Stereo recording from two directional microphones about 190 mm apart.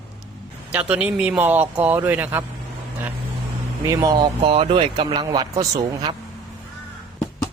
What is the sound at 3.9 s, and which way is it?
Speech, 20° right (ahead or behind).